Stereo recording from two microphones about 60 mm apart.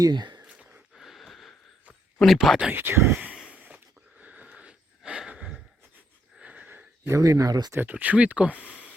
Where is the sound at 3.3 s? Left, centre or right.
Centre.